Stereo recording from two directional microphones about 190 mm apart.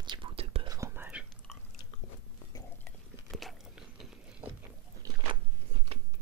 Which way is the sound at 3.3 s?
Centre (ahead or behind).